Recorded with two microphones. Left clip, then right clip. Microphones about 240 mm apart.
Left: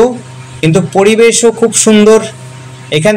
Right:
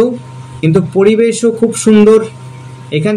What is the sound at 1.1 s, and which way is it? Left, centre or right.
Speech, centre.